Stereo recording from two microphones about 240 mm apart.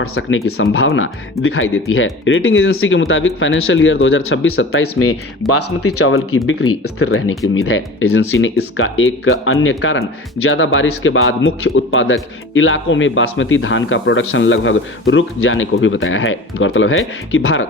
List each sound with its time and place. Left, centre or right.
0.0 s speech: left